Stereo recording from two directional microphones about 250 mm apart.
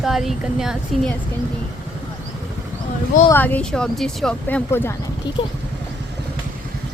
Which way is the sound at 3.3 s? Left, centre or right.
Centre.